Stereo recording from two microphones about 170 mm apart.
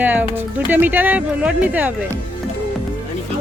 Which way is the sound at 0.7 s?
10° right (ahead or behind).